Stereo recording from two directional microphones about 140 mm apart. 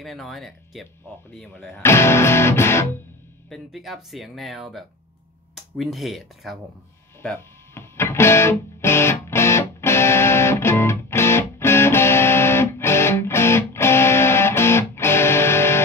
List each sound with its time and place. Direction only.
0.0 s speech: centre (ahead or behind)
1.8 s music: 20° left (ahead or behind)
3.4 s speech: centre (ahead or behind)
7.2 s music: 15° left (ahead or behind)